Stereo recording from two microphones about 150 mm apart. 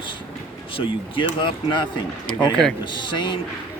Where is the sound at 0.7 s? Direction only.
35° left (ahead or behind).